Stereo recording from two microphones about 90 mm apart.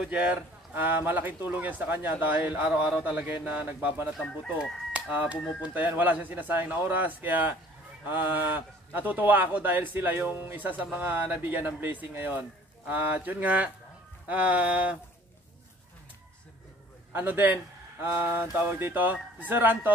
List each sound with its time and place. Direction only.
0.0 s a man's voice: 15° right (ahead or behind)
14.2 s music: 15° right (ahead or behind)
17.1 s a man's voice: 20° right (ahead or behind)